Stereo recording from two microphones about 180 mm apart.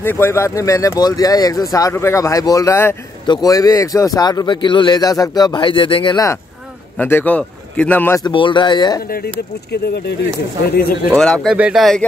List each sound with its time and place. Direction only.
0.0 s a man's voice: 15° left (ahead or behind)
7.0 s speech: 10° left (ahead or behind)
8.3 s a man's voice: 25° left (ahead or behind)
11.1 s speech: 5° left (ahead or behind)